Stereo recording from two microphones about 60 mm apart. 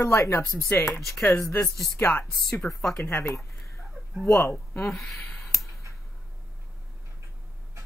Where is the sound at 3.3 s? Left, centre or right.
Left.